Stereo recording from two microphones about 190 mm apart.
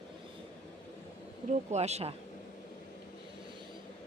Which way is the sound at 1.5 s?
35° right (ahead or behind).